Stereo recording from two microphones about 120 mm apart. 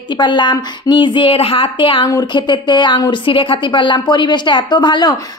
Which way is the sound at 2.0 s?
35° left (ahead or behind).